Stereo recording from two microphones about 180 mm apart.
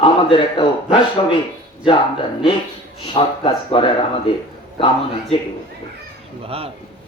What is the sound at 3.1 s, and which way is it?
Speech, 30° left (ahead or behind).